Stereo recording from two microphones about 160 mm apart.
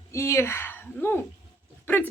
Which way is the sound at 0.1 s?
20° left (ahead or behind).